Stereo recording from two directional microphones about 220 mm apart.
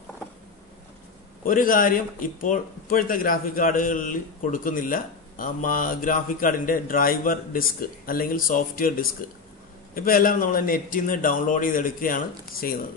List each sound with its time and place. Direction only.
1.4 s speech: 40° left (ahead or behind)